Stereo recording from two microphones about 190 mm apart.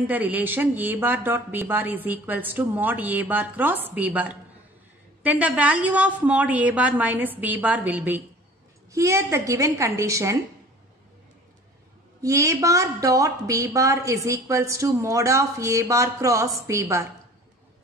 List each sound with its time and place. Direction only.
0.0 s a woman's voice: 10° right (ahead or behind)
12.2 s a woman's voice: 15° right (ahead or behind)